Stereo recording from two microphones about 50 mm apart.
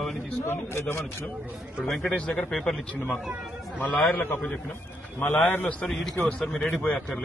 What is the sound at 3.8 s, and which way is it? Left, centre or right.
Speech, left.